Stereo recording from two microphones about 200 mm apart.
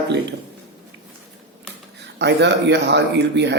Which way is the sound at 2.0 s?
60° right (ahead or behind).